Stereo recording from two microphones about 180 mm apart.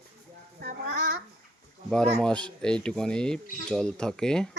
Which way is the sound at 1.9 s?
5° left (ahead or behind).